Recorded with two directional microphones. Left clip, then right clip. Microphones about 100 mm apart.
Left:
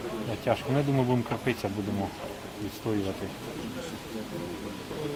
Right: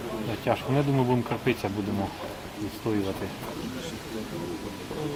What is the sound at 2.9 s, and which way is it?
Speech, 30° left (ahead or behind).